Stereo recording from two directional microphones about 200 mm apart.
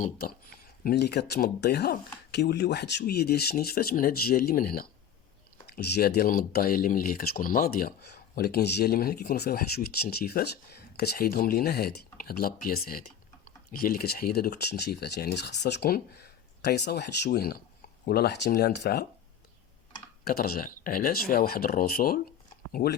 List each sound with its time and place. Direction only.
0.0 s speech: 50° left (ahead or behind)
20.2 s speech: 50° left (ahead or behind)